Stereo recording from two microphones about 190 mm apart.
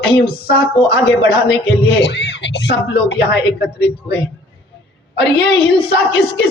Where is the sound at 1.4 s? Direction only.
60° left (ahead or behind).